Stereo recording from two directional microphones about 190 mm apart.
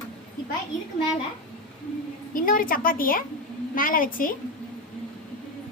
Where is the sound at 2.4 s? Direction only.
50° left (ahead or behind).